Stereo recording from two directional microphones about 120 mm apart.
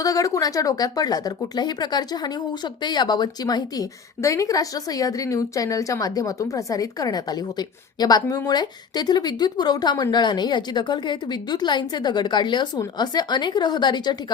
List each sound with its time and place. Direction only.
0.0 s a woman's voice: 30° left (ahead or behind)